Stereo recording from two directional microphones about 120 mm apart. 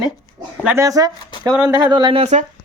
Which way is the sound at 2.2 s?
75° right (ahead or behind).